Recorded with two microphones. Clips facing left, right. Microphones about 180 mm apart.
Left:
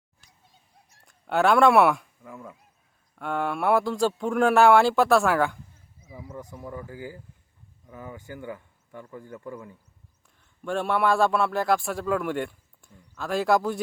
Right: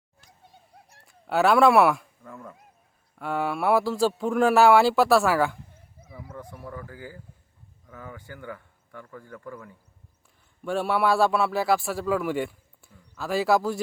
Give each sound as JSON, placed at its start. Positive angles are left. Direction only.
{"t": 0.5, "sound": "a sound", "side_deg": -60}
{"t": 1.0, "sound": "speech", "side_deg": -5}
{"t": 3.2, "sound": "a man's voice", "side_deg": -5}
{"t": 6.1, "sound": "speech", "side_deg": 10}
{"t": 10.6, "sound": "a man's voice", "side_deg": -5}